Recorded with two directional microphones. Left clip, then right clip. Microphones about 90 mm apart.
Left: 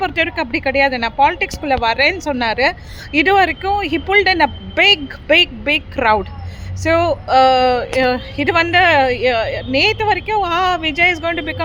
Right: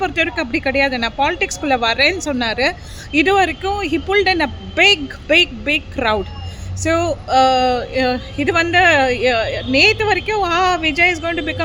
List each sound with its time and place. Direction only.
0.0 s speech: 35° right (ahead or behind)